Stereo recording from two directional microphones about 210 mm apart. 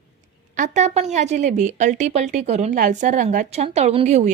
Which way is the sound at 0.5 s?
35° right (ahead or behind).